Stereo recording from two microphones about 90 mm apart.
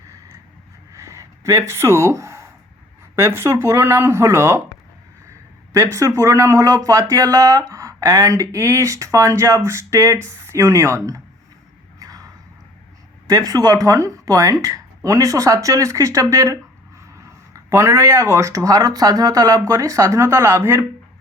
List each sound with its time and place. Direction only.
0.9 s gasp: 35° right (ahead or behind)
3.2 s speech: 30° right (ahead or behind)
5.7 s speech: 35° right (ahead or behind)
11.9 s a sound: 45° right (ahead or behind)
13.2 s speech: 45° right (ahead or behind)